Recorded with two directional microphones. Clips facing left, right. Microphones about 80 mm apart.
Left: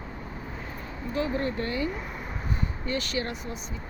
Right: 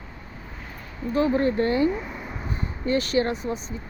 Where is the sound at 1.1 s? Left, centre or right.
Right.